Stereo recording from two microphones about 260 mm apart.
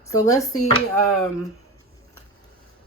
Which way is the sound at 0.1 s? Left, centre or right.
Centre.